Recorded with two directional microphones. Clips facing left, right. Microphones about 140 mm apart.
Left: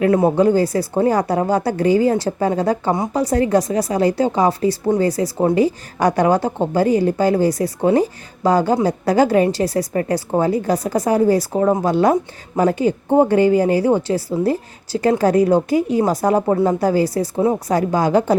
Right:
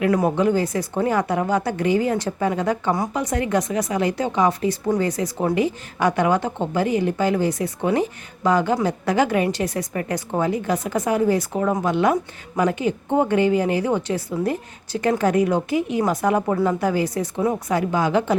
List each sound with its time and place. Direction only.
0.0 s speech: 25° left (ahead or behind)
2.9 s a woman's voice: 25° left (ahead or behind)
3.2 s speech: 35° left (ahead or behind)